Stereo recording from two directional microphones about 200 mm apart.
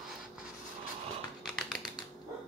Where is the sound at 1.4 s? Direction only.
Centre (ahead or behind).